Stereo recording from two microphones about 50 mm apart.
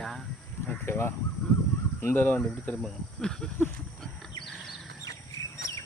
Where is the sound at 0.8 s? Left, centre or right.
Left.